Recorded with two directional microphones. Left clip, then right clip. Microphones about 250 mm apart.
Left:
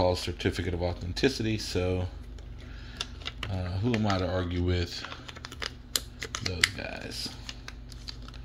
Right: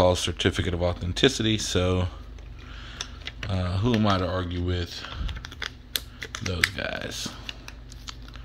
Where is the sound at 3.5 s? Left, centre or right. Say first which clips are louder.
Right 7 dB; centre.